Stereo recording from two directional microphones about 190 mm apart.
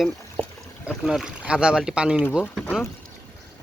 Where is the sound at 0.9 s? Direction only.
Centre (ahead or behind).